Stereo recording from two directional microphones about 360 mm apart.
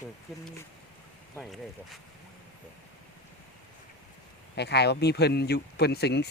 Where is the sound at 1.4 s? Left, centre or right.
Centre.